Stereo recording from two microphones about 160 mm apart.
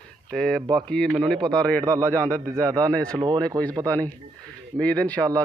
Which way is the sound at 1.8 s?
20° right (ahead or behind).